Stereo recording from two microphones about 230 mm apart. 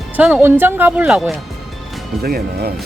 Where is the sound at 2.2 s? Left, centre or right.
Right.